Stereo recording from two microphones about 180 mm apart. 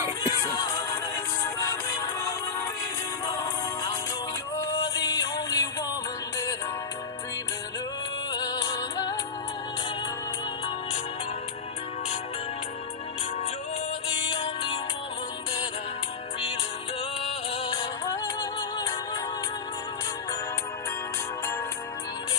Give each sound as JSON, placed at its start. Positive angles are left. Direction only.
{"t": 0.2, "sound": "music", "side_deg": 20}
{"t": 8.3, "sound": "music", "side_deg": 25}
{"t": 14.3, "sound": "music", "side_deg": 30}
{"t": 17.2, "sound": "music", "side_deg": 30}